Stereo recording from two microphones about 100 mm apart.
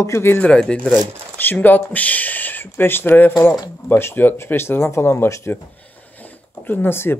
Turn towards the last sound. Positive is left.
turn(degrees=20)  # may be behind; listen again after turning